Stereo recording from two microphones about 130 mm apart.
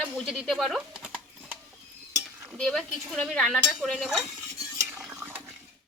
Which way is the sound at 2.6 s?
5° left (ahead or behind).